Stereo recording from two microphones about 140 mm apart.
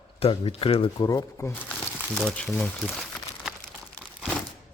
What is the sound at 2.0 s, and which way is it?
Crumpling, 5° left (ahead or behind).